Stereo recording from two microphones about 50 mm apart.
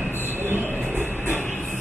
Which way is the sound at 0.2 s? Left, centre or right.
Right.